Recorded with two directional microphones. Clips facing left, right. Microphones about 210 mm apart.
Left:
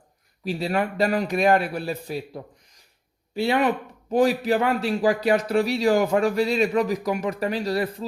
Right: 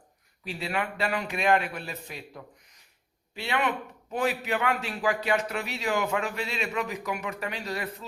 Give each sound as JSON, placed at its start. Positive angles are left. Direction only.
{"t": 0.4, "sound": "a man's voice", "side_deg": 40}